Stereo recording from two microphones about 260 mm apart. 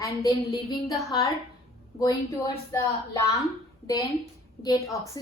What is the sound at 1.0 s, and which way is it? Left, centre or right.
A woman's voice, centre.